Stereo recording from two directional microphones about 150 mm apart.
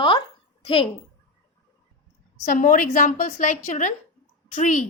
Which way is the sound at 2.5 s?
65° left (ahead or behind).